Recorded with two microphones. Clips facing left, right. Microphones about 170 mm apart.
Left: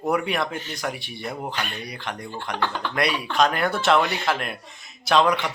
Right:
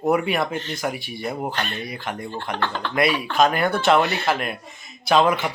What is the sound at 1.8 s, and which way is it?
Speech, 5° right (ahead or behind).